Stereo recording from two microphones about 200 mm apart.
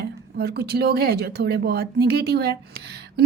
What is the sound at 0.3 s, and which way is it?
Speech, 50° right (ahead or behind).